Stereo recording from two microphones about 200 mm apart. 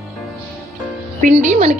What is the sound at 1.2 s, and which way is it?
Speech, 35° right (ahead or behind).